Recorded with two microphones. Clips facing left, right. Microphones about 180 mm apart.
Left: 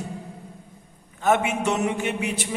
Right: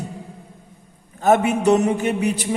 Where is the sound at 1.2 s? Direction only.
40° right (ahead or behind).